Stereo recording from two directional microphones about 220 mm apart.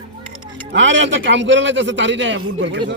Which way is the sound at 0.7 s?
55° right (ahead or behind).